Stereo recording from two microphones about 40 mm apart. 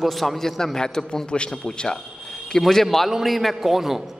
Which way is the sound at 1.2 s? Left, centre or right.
Left.